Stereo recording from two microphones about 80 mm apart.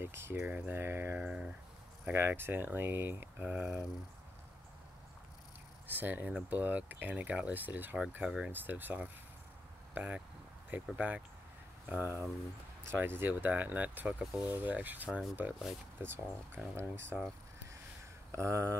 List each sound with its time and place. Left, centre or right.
0.0 s speech: right
1.1 s speech: centre
2.1 s speech: right
3.4 s speech: centre
5.9 s speech: right
8.5 s speech: right
18.3 s speech: right